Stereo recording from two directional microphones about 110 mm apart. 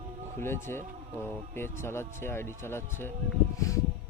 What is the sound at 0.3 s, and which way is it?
Speech, 20° left (ahead or behind).